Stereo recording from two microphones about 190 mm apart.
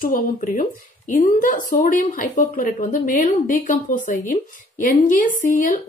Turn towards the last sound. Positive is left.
turn(degrees=45)  # may be behind; listen again after turning